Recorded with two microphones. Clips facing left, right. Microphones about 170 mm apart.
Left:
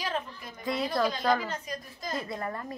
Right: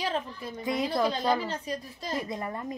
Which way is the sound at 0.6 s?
15° right (ahead or behind).